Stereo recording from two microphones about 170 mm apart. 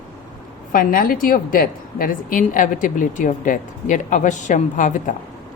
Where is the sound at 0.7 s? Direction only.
55° left (ahead or behind).